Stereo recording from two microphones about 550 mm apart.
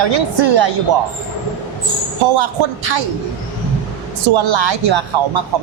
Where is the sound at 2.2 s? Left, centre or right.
Right.